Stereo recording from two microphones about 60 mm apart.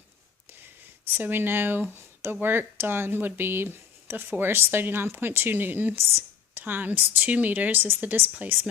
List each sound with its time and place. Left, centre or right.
1.1 s speech: right
6.0 s a woman's voice: right